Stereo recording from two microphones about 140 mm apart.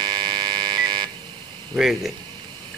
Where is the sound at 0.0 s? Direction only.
35° right (ahead or behind).